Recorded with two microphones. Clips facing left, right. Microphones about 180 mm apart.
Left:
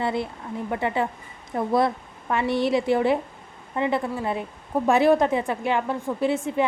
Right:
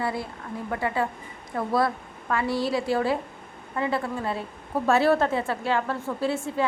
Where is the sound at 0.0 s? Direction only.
25° left (ahead or behind).